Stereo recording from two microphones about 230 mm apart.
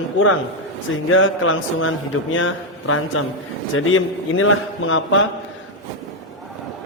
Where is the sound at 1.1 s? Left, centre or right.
Left.